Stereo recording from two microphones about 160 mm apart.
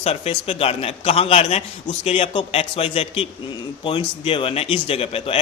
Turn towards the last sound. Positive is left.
turn(degrees=35)  # may be behind; listen again after turning